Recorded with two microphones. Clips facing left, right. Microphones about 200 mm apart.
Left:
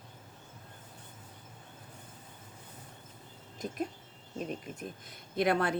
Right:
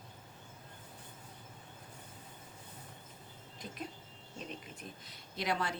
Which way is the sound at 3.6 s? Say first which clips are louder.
Left 9 dB; 45° left (ahead or behind).